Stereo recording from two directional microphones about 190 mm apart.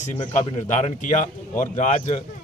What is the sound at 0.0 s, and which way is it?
A man's voice, 40° left (ahead or behind).